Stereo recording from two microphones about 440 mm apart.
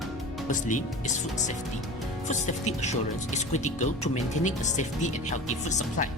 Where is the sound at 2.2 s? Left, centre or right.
Centre.